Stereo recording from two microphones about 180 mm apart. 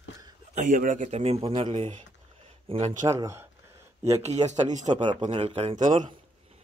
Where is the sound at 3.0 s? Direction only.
15° right (ahead or behind).